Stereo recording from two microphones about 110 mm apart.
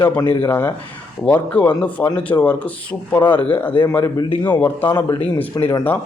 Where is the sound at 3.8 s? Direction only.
30° left (ahead or behind).